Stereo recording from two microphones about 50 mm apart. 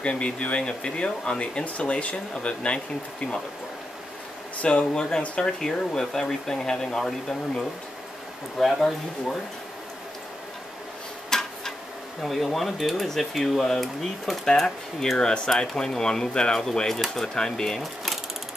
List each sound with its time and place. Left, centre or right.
0.0 s speech: left
4.6 s speech: centre
5.6 s speech: centre
11.2 s tick-tock: centre
12.2 s speech: centre
15.1 s speech: centre